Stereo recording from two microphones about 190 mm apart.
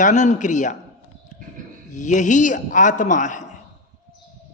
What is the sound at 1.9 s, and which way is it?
A man's voice, 40° left (ahead or behind).